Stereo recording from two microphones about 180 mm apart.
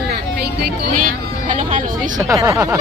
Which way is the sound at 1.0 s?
45° right (ahead or behind).